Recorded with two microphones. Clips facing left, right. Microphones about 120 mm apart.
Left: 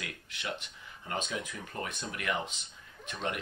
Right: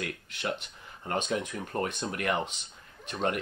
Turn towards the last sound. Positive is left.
turn(degrees=-35)  # may be behind; listen again after turning